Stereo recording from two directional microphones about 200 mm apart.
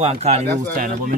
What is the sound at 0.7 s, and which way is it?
Speech, 45° right (ahead or behind).